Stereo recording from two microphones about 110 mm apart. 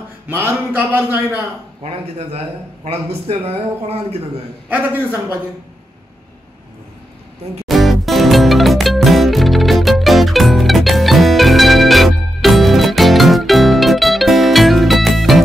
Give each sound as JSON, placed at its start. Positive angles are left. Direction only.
{"t": 0.3, "sound": "speech", "side_deg": -20}
{"t": 1.8, "sound": "a man's voice", "side_deg": -75}
{"t": 7.6, "sound": "music", "side_deg": 0}